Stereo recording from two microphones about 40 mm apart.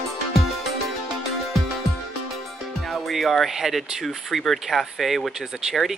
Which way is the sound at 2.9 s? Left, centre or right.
Centre.